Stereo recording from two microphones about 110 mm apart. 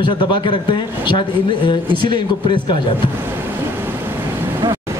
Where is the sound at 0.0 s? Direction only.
45° left (ahead or behind).